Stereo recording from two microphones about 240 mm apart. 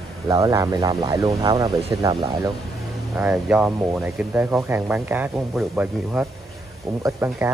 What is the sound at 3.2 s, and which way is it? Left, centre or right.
Speech, centre.